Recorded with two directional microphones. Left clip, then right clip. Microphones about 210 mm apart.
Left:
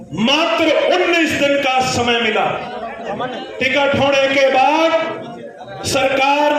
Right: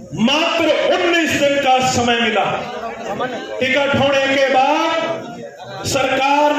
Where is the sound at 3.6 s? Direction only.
50° left (ahead or behind).